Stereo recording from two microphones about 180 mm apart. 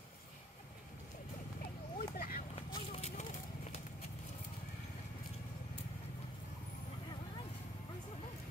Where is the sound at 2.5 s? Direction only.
35° left (ahead or behind).